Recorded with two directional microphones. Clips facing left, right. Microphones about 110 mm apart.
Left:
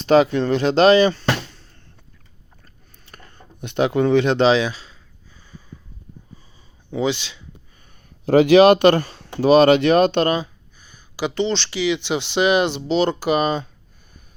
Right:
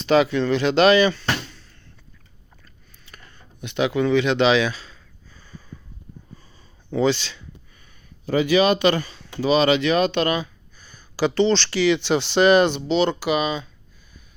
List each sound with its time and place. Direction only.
0.0 s speech: 40° left (ahead or behind)
3.1 s a sound: 50° left (ahead or behind); by 7.4 s 15° left (ahead or behind)
8.2 s speech: 85° left; by 10.5 s 35° left (ahead or behind)
10.8 s speech: 15° left (ahead or behind)
12.9 s speech: 40° left (ahead or behind)